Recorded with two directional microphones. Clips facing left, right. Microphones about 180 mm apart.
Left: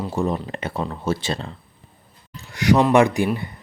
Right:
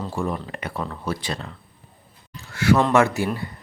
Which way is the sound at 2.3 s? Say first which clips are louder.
Left 1 dB; 15° left (ahead or behind).